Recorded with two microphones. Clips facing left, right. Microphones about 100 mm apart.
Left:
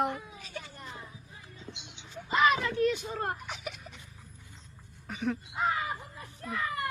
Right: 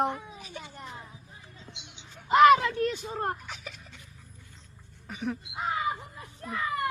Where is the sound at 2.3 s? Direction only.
65° right (ahead or behind).